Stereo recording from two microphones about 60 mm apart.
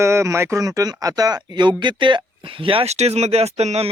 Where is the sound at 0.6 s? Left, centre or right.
Right.